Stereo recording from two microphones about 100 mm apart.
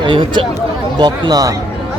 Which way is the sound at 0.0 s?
55° right (ahead or behind).